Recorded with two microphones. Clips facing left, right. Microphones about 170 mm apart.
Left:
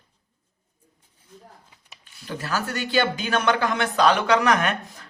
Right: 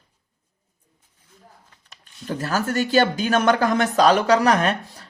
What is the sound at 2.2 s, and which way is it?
Speech, 45° right (ahead or behind).